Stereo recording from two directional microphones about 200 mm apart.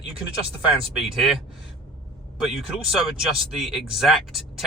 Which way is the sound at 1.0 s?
Centre (ahead or behind).